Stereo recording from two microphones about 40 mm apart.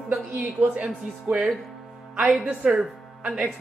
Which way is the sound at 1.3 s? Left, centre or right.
Right.